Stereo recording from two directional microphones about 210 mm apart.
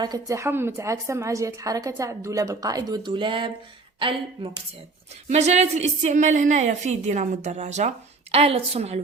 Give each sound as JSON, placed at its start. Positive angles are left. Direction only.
{"t": 0.0, "sound": "a woman's voice", "side_deg": -15}
{"t": 5.3, "sound": "a woman's voice", "side_deg": -30}